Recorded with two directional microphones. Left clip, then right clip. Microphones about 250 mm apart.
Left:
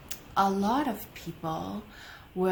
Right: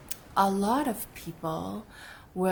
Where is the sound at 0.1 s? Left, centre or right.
Right.